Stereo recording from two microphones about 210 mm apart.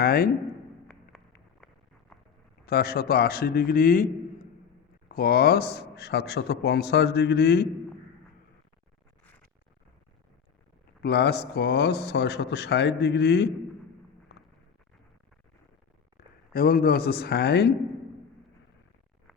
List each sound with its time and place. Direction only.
0.0 s a sound: 45° left (ahead or behind)
2.6 s a man's voice: 45° left (ahead or behind)
11.0 s a man's voice: 50° left (ahead or behind)
16.5 s a man's voice: 45° left (ahead or behind)